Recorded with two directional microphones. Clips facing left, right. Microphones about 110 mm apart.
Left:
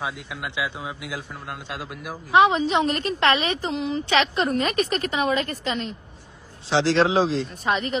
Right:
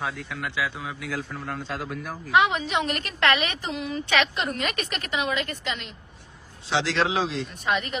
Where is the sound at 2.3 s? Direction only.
35° left (ahead or behind).